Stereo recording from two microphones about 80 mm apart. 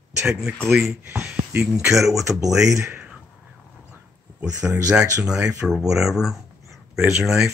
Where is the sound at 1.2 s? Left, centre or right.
Centre.